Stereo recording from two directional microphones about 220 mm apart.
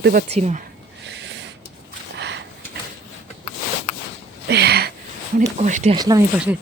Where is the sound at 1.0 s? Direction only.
55° right (ahead or behind).